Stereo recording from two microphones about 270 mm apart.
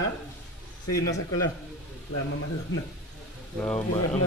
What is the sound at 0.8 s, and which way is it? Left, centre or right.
Speech, left.